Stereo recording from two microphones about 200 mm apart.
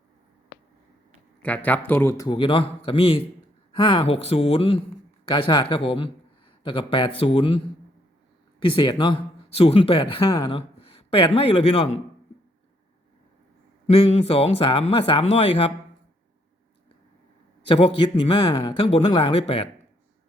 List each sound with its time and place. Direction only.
1.4 s speech: 5° left (ahead or behind); by 7.6 s 25° left (ahead or behind)
8.6 s speech: 25° left (ahead or behind)
13.8 s speech: 30° left (ahead or behind)
17.7 s speech: 25° left (ahead or behind)